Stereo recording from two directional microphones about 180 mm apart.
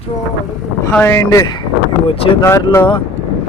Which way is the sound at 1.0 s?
15° left (ahead or behind).